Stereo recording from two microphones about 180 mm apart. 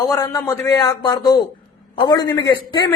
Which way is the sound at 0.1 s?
20° left (ahead or behind).